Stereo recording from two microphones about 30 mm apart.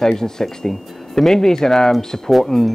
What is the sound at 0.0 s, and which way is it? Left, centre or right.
Speech, centre.